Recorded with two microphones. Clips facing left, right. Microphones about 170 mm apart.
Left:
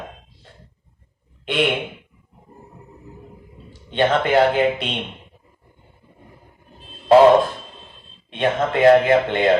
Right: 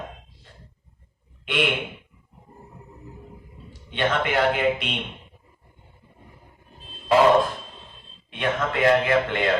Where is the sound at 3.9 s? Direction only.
35° left (ahead or behind).